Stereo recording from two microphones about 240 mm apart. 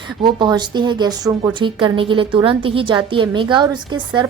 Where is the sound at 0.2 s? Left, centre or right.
Centre.